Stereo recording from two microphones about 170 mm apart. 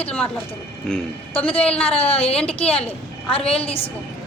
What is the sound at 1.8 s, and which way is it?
A woman's voice, 35° left (ahead or behind).